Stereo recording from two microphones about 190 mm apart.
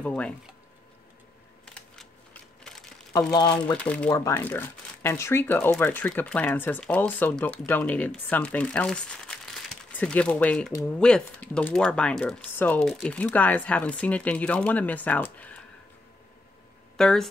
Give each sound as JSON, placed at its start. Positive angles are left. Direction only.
{"t": 0.0, "sound": "speech", "side_deg": 5}
{"t": 3.1, "sound": "speech", "side_deg": 20}
{"t": 3.7, "sound": "speech", "side_deg": 5}
{"t": 16.9, "sound": "speech", "side_deg": 5}